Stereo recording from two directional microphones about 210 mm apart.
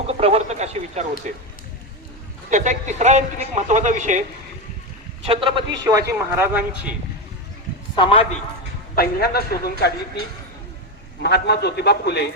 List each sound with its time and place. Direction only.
0.1 s speech: 30° right (ahead or behind)
2.5 s speech: 35° right (ahead or behind)
5.2 s a man's voice: 25° right (ahead or behind)
6.1 s speech: 10° right (ahead or behind)
7.9 s a man's voice: 25° left (ahead or behind)
9.0 s a man's voice: 45° left (ahead or behind)
11.2 s a man's voice: 50° left (ahead or behind)